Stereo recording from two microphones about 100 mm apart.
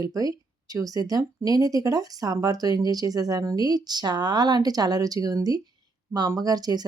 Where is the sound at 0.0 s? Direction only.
35° right (ahead or behind).